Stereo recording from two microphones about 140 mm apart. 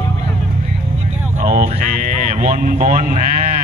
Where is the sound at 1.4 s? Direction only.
85° right.